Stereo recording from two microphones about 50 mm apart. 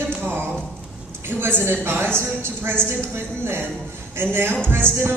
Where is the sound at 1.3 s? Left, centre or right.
Right.